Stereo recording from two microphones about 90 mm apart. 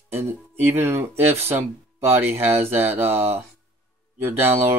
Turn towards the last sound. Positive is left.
turn(degrees=-25)  # may be behind; listen again after turning